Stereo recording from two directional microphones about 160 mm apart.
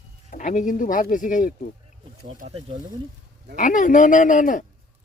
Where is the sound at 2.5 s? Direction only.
35° right (ahead or behind).